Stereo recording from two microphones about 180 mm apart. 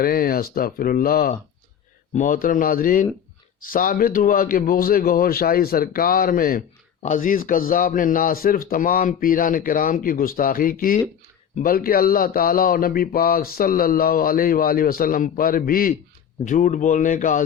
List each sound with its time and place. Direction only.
0.0 s speech: 55° left (ahead or behind)